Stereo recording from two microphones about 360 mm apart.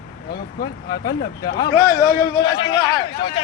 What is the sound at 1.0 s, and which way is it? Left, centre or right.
Speech, centre.